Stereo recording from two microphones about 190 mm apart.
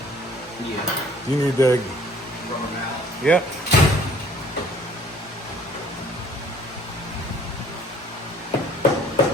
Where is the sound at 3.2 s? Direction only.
5° left (ahead or behind).